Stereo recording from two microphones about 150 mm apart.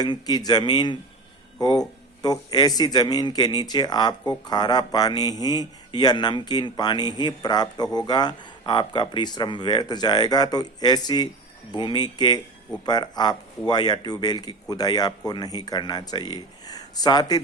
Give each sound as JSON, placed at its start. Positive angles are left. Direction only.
{"t": 0.0, "sound": "a man's voice", "side_deg": 25}